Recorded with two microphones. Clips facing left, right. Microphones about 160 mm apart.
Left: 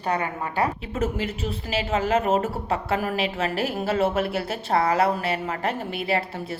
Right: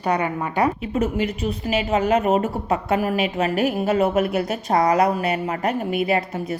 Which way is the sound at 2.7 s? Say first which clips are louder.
Right 6 dB; 40° right (ahead or behind).